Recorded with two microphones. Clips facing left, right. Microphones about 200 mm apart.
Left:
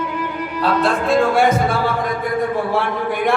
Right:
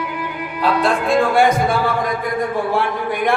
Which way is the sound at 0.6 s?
Centre (ahead or behind).